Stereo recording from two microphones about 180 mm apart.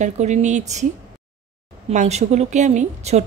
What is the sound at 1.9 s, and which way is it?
Speech, 40° right (ahead or behind).